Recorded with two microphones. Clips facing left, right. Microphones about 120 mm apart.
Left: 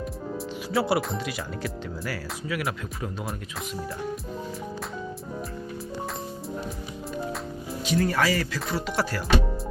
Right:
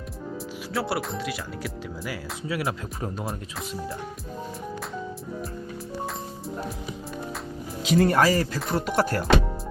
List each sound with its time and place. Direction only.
0.7 s speech: centre (ahead or behind)
2.5 s speech: 30° right (ahead or behind)
7.9 s speech: 75° right (ahead or behind)
8.1 s speech: 40° right (ahead or behind)
8.7 s music: 50° right (ahead or behind)